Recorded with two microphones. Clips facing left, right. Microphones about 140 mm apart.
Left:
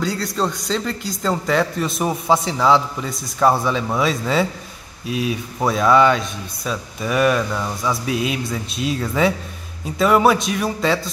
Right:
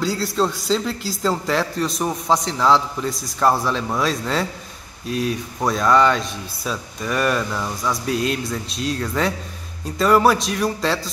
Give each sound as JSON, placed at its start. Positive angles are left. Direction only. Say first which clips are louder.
{"t": 0.0, "sound": "a man's voice", "louder": "right 1 dB", "side_deg": 0}